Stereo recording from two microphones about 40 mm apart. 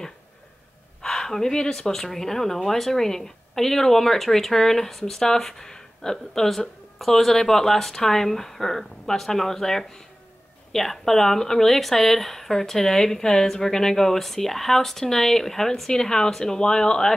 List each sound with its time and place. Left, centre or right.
1.0 s speech: centre